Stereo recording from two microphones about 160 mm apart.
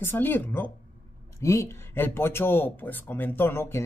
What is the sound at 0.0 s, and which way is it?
Speech, 15° left (ahead or behind).